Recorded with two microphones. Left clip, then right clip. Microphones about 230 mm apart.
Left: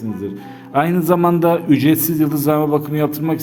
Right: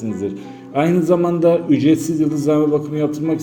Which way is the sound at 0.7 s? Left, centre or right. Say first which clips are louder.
Even; left.